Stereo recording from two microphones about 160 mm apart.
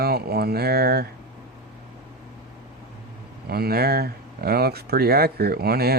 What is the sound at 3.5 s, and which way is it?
Speech, 75° right (ahead or behind).